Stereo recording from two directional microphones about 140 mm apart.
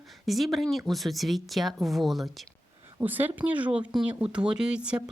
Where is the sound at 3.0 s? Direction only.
15° right (ahead or behind).